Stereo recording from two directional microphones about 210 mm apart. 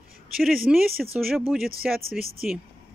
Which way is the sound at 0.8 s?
45° right (ahead or behind).